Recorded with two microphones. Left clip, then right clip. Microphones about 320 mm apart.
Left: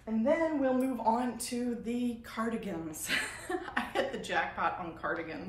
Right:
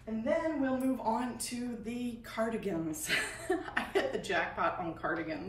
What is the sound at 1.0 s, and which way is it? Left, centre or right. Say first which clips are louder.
Speech: left 3 dB; centre.